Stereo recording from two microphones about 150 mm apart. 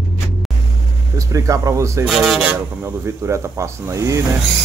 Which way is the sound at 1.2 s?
20° right (ahead or behind).